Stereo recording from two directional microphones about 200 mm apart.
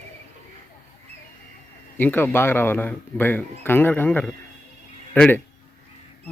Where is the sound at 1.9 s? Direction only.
10° left (ahead or behind).